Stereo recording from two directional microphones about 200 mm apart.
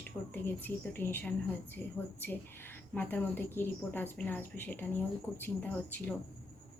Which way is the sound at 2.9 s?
10° left (ahead or behind).